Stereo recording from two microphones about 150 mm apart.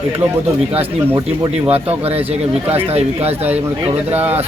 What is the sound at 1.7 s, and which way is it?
Speech, 40° right (ahead or behind).